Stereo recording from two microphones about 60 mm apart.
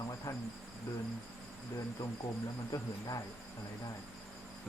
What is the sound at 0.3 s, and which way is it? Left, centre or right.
Insect, left.